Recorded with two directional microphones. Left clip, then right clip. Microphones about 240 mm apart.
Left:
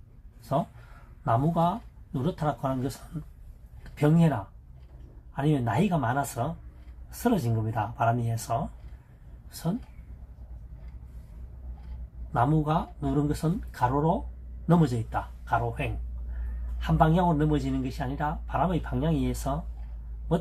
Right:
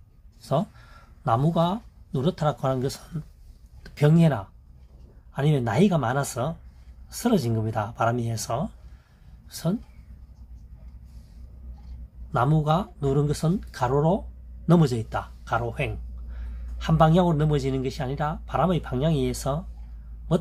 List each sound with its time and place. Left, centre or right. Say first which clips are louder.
1.2 s speech: right 2 dB; right
3.9 s speech: right 3 dB; right
12.3 s speech: right 2 dB; right
16.8 s speech: right 3 dB; right